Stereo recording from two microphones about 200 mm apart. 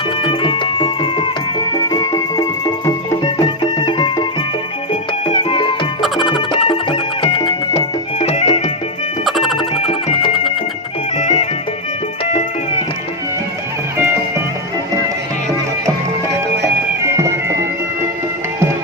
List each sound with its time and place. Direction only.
0.2 s music: 25° left (ahead or behind)
5.3 s music: 25° left (ahead or behind)
6.0 s music: centre (ahead or behind)
6.3 s music: 25° left (ahead or behind)
9.2 s music: centre (ahead or behind)
9.8 s music: 30° left (ahead or behind)